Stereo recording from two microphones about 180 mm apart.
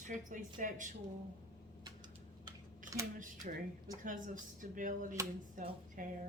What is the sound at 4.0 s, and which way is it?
A woman's voice, 45° right (ahead or behind).